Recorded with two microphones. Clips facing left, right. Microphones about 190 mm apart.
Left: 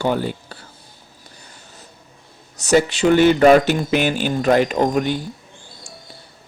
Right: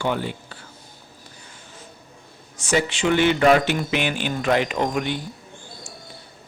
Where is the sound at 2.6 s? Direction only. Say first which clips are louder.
Left 6 dB; 40° left (ahead or behind).